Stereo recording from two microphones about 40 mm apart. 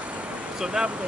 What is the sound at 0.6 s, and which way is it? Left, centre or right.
Speech, centre.